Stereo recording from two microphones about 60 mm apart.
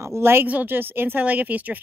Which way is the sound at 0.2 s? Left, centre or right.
Right.